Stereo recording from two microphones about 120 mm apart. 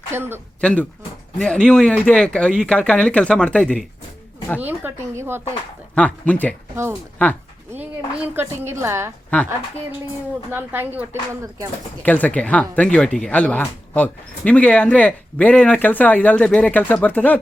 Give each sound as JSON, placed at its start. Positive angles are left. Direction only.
{"t": 0.1, "sound": "a woman's voice", "side_deg": -20}
{"t": 0.6, "sound": "speech", "side_deg": 10}
{"t": 4.6, "sound": "a woman's voice", "side_deg": -20}
{"t": 5.9, "sound": "speech", "side_deg": 10}
{"t": 7.7, "sound": "a woman's voice", "side_deg": -15}
{"t": 10.5, "sound": "a woman's voice", "side_deg": -15}
{"t": 12.0, "sound": "speech", "side_deg": 15}